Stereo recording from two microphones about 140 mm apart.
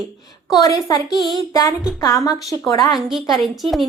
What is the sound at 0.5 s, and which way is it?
A woman's voice, 25° left (ahead or behind).